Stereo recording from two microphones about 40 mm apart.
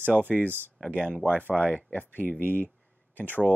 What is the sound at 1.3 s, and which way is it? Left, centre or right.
Speech, left.